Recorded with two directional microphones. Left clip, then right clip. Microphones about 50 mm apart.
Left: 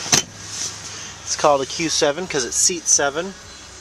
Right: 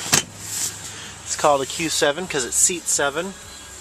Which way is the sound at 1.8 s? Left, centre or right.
Left.